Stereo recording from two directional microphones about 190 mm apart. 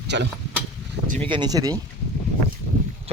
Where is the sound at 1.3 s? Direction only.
20° right (ahead or behind).